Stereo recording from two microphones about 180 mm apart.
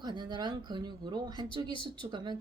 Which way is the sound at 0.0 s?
25° right (ahead or behind).